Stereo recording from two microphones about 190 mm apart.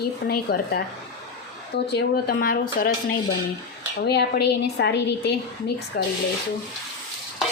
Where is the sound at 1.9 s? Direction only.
60° left (ahead or behind).